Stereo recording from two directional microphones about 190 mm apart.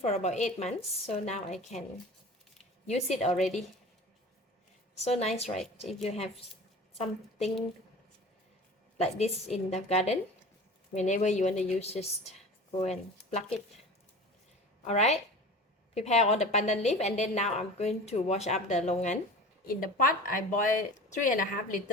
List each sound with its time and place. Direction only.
0.0 s a woman's voice: 35° left (ahead or behind)
2.8 s a woman's voice: 35° left (ahead or behind)
4.9 s a woman's voice: 35° left (ahead or behind)
9.0 s a woman's voice: 35° left (ahead or behind)
14.8 s a woman's voice: 35° left (ahead or behind)
19.6 s speech: 50° left (ahead or behind)